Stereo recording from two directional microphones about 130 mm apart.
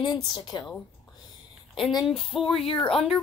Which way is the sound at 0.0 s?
35° left (ahead or behind).